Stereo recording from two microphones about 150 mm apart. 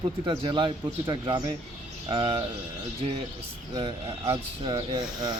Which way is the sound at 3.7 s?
25° right (ahead or behind).